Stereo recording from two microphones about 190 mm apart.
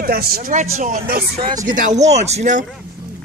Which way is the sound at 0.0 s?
50° right (ahead or behind).